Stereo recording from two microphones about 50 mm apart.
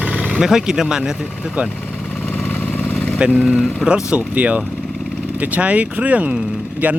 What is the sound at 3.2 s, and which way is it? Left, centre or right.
Speech, right.